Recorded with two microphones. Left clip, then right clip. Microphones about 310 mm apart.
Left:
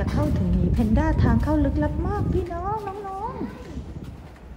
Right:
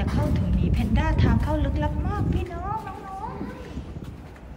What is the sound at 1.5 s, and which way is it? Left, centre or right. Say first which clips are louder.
Speech: left 4 dB; right.